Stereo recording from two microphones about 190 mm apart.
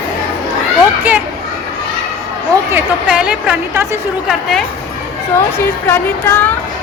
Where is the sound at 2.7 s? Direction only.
5° right (ahead or behind).